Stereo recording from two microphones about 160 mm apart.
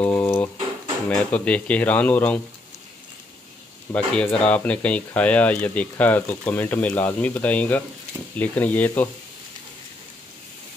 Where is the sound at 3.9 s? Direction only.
10° left (ahead or behind).